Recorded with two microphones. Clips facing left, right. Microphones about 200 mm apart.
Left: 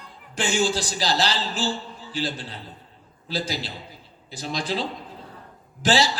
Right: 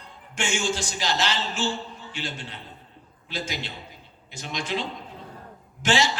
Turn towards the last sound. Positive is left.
turn(degrees=35)  # may be behind; listen again after turning